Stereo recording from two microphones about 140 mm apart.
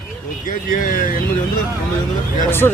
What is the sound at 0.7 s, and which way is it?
Speech, 70° left (ahead or behind).